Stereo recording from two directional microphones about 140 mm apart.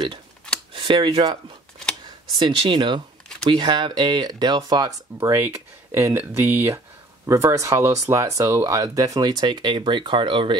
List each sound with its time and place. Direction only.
0.7 s speech: 35° right (ahead or behind)